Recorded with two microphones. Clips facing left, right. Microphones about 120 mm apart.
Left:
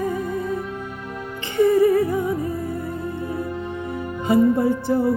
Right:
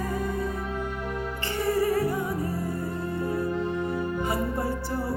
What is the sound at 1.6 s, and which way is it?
Music, 20° left (ahead or behind).